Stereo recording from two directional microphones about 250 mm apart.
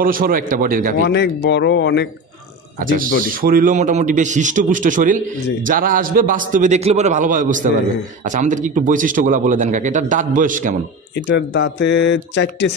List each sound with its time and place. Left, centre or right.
0.0 s a man's voice: right
1.0 s speech: left
2.8 s a man's voice: right
11.2 s speech: left